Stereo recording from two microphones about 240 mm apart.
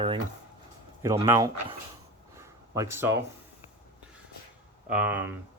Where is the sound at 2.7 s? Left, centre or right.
Centre.